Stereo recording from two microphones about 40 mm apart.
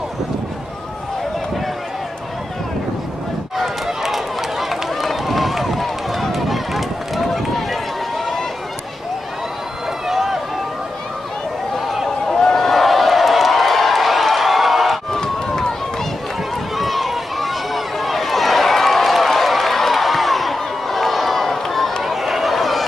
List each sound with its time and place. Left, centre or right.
3.5 s run: centre
10.0 s run: centre
12.3 s a sound: centre
15.1 s run: centre
16.7 s run: centre
22.0 s a sound: centre